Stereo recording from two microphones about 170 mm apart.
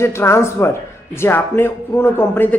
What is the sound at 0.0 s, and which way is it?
Speech, 15° left (ahead or behind).